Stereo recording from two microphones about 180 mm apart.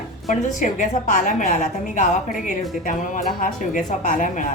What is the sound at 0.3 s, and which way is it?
A woman's voice, 45° left (ahead or behind).